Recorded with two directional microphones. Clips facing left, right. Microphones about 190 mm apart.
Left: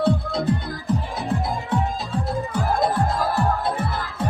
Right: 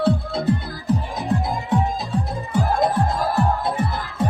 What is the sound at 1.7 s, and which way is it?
Music, 20° right (ahead or behind).